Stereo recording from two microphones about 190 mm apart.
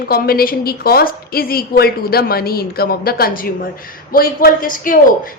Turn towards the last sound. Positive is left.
turn(degrees=45)  # may be behind; listen again after turning